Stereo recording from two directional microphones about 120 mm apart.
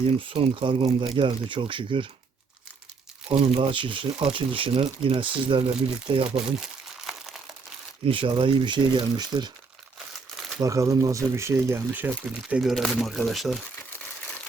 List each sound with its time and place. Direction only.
0.0 s speech: 45° right (ahead or behind)
3.4 s speech: 50° right (ahead or behind)
8.0 s speech: 50° right (ahead or behind)
10.6 s speech: 30° right (ahead or behind)
12.5 s speech: centre (ahead or behind)